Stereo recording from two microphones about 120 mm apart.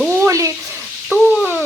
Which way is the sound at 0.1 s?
25° right (ahead or behind).